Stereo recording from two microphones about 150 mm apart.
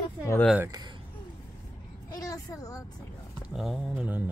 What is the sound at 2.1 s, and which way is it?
Speech, 25° left (ahead or behind).